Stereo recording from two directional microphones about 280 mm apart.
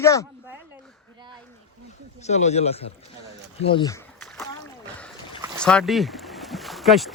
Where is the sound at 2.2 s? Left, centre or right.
Left.